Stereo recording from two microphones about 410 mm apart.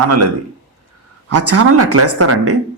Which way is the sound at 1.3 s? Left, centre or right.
Right.